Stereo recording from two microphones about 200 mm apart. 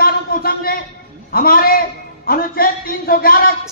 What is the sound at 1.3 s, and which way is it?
Speech, 50° left (ahead or behind).